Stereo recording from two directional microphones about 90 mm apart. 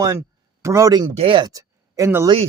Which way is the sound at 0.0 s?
35° right (ahead or behind).